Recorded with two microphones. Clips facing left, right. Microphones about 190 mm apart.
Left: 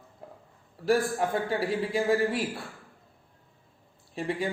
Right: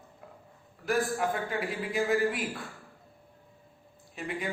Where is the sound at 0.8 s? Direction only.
30° left (ahead or behind).